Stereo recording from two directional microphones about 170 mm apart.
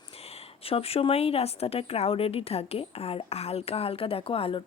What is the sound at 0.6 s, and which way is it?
Speech, 35° left (ahead or behind).